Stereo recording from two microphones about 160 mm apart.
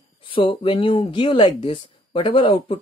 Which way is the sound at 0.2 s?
30° left (ahead or behind).